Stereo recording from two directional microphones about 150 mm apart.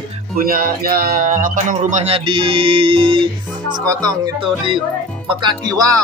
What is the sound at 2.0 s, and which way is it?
Speech, 35° right (ahead or behind).